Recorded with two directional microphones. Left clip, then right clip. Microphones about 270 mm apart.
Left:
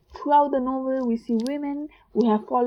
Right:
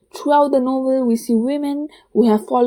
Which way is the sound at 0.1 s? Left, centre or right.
Right.